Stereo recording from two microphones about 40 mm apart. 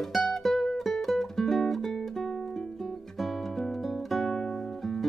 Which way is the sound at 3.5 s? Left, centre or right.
Centre.